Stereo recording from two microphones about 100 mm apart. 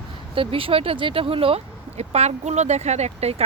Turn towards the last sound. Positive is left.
turn(degrees=-90)